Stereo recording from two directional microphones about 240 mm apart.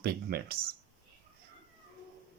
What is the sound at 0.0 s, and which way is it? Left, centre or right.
Speech, right.